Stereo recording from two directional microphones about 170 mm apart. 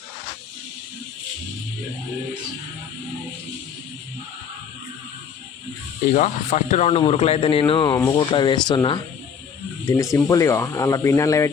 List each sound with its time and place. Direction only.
6.1 s speech: 45° left (ahead or behind); by 11.5 s 15° left (ahead or behind)